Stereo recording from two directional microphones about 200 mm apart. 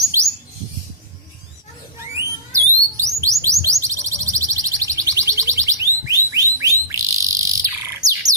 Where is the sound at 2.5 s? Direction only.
15° right (ahead or behind).